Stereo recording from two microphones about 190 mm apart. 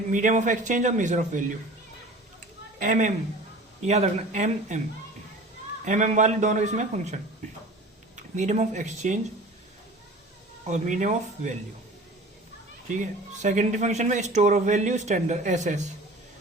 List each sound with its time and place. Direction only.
0.1 s speech: 40° right (ahead or behind)
2.7 s a man's voice: 40° right (ahead or behind)
5.8 s speech: 40° right (ahead or behind)
10.7 s speech: 40° right (ahead or behind)
12.9 s speech: 40° right (ahead or behind)